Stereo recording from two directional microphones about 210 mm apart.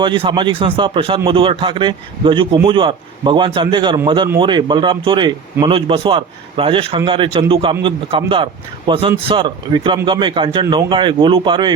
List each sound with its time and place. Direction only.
0.0 s speech: 20° right (ahead or behind)